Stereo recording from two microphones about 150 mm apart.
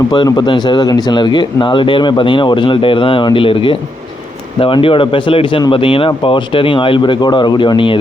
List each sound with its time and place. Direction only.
0.1 s speech: 30° left (ahead or behind)